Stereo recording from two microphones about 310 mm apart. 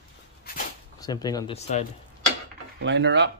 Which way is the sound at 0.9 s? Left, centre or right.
Centre.